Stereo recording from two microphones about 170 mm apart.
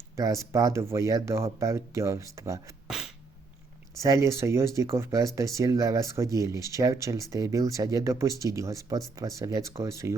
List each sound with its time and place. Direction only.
0.2 s speech: 20° right (ahead or behind)
2.8 s beatboxing: 5° right (ahead or behind)
4.0 s speech: 15° right (ahead or behind)